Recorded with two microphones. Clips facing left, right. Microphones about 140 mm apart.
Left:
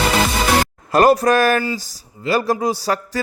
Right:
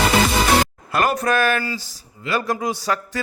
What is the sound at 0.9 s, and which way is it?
Speech, 35° left (ahead or behind).